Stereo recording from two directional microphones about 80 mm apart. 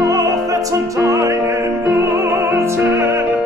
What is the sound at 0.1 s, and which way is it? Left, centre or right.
Music, right.